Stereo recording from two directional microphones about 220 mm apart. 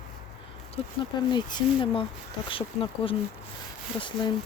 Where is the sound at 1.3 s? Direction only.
20° left (ahead or behind).